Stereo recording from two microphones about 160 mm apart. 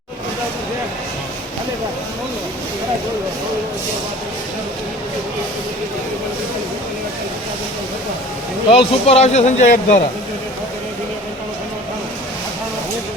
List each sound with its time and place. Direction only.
8.7 s speech: 40° left (ahead or behind)